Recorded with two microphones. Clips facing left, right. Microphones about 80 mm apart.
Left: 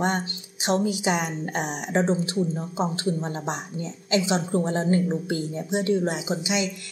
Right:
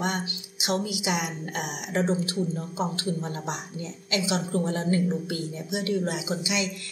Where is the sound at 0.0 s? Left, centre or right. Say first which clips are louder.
Left 4 dB; left.